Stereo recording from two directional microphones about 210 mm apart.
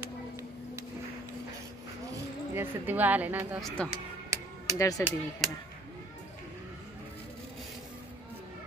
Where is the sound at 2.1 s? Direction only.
10° right (ahead or behind).